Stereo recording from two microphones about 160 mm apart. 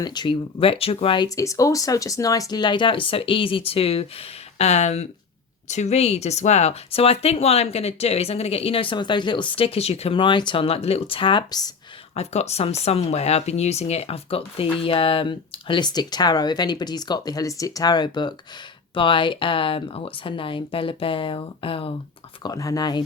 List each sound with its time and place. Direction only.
0.0 s speech: 25° left (ahead or behind)
12.1 s speech: 40° left (ahead or behind)
22.4 s speech: 20° left (ahead or behind)